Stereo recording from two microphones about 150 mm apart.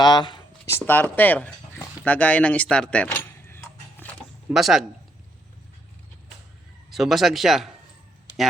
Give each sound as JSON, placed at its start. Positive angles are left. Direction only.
{"t": 0.0, "sound": "speech", "side_deg": 30}
{"t": 0.6, "sound": "speech", "side_deg": 15}
{"t": 2.0, "sound": "a sound", "side_deg": 10}
{"t": 4.5, "sound": "speech", "side_deg": 0}
{"t": 6.9, "sound": "speech", "side_deg": 0}